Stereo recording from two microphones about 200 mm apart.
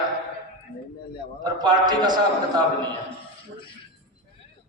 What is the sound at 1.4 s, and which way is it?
Speech, 20° right (ahead or behind).